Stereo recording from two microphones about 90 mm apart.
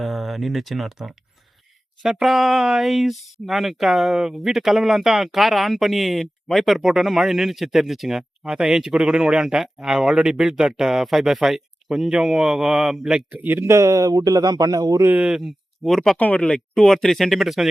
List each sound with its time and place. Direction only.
0.0 s speech: centre (ahead or behind)
13.3 s speech: 20° right (ahead or behind); by 15.0 s 45° right (ahead or behind)
15.0 s speech: 20° right (ahead or behind)
15.3 s speech: centre (ahead or behind)
16.1 s speech: 15° left (ahead or behind); by 17.7 s centre (ahead or behind)